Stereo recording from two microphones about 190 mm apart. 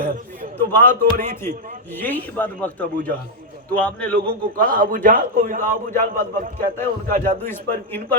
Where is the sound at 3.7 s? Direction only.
5° left (ahead or behind).